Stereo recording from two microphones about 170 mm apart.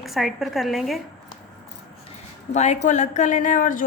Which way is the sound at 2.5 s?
40° left (ahead or behind).